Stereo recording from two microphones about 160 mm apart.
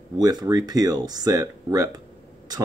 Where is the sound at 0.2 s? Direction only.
25° right (ahead or behind).